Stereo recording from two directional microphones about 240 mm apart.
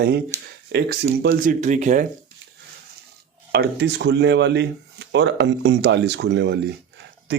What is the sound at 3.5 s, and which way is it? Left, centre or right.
Speech, right.